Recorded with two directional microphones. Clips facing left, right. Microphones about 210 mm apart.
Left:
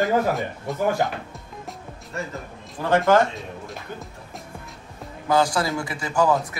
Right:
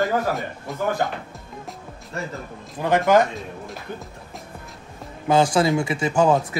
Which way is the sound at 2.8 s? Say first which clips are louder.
Right 1 dB; 15° right (ahead or behind).